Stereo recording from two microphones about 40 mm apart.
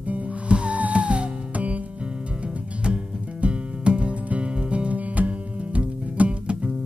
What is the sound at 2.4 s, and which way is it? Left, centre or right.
Music, right.